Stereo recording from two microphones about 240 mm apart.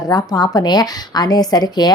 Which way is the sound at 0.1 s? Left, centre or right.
Centre.